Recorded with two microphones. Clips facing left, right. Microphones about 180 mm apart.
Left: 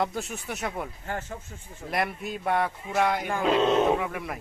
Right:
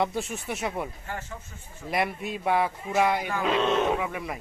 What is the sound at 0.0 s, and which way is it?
Cattle, centre (ahead or behind).